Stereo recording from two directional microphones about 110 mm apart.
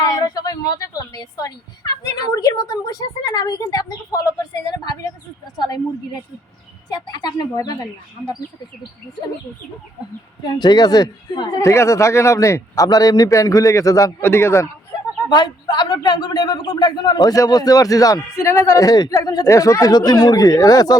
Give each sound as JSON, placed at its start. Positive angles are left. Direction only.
{"t": 0.0, "sound": "speech", "side_deg": 35}
{"t": 5.5, "sound": "a man's voice", "side_deg": 40}
{"t": 6.9, "sound": "a man's voice", "side_deg": 40}
{"t": 10.6, "sound": "speech", "side_deg": 40}
{"t": 11.6, "sound": "a man's voice", "side_deg": 25}
{"t": 15.3, "sound": "a man's voice", "side_deg": 40}